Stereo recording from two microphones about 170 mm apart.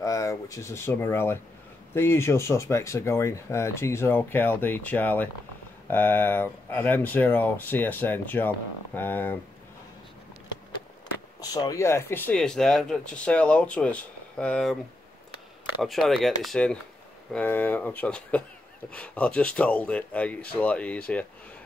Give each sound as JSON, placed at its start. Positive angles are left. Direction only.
{"t": 0.0, "sound": "speech", "side_deg": 20}
{"t": 11.4, "sound": "speech", "side_deg": 20}
{"t": 15.8, "sound": "speech", "side_deg": 0}